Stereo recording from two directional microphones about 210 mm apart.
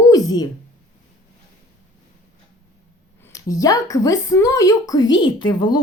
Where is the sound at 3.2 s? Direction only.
15° left (ahead or behind).